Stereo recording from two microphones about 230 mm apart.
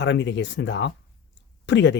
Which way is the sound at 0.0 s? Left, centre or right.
Left.